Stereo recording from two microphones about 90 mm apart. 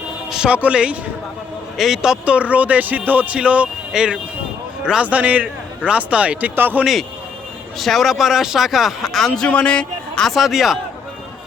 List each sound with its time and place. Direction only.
0.3 s a woman's voice: 10° right (ahead or behind)
7.8 s speech: centre (ahead or behind)
9.5 s speech: 15° left (ahead or behind); by 10.8 s 5° right (ahead or behind)